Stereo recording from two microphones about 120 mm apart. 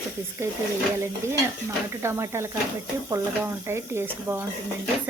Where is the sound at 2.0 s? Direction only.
25° right (ahead or behind).